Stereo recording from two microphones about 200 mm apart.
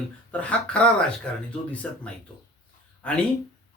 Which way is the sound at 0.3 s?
5° left (ahead or behind).